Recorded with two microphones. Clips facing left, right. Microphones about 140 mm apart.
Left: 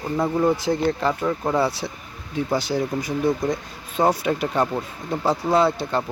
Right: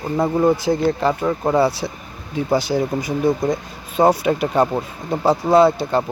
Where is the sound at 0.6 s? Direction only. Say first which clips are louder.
Right 3 dB; 5° right (ahead or behind).